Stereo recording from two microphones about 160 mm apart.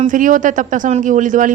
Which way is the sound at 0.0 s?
55° right (ahead or behind).